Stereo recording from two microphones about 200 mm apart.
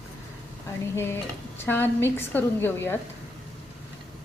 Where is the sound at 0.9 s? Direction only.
10° left (ahead or behind).